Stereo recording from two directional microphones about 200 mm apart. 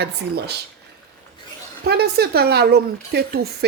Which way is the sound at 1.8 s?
50° right (ahead or behind).